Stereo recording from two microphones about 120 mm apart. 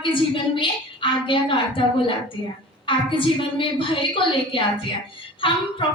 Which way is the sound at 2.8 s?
45° left (ahead or behind).